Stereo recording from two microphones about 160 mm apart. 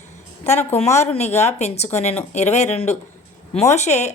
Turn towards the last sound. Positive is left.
turn(degrees=45)  # may be behind; listen again after turning